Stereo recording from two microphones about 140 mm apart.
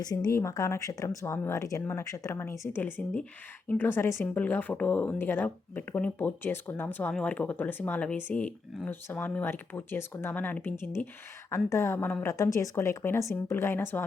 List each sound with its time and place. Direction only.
0.0 s a woman's voice: 30° left (ahead or behind)